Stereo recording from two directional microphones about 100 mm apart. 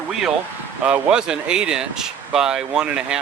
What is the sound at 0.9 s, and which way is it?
Speech, 10° right (ahead or behind).